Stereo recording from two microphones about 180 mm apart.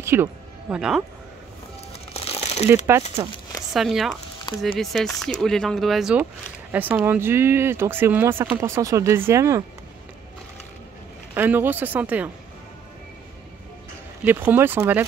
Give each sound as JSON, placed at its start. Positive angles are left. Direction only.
{"t": 0.0, "sound": "speech", "side_deg": -15}
{"t": 1.9, "sound": "crumpling", "side_deg": 35}
{"t": 3.7, "sound": "speech", "side_deg": 0}
{"t": 11.3, "sound": "speech", "side_deg": -10}
{"t": 14.2, "sound": "speech", "side_deg": -10}